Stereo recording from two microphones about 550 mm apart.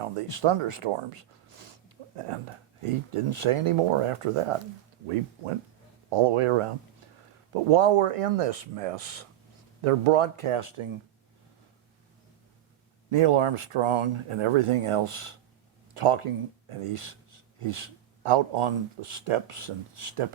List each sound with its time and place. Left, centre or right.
0.0 s speech: right
9.8 s speech: right
13.1 s speech: right